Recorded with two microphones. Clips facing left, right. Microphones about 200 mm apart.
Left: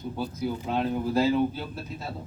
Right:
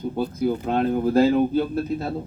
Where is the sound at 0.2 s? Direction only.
55° right (ahead or behind).